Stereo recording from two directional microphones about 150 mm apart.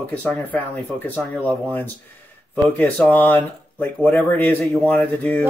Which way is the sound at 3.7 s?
10° left (ahead or behind).